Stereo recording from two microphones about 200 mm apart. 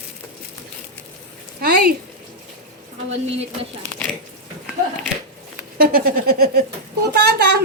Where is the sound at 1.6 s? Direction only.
50° right (ahead or behind).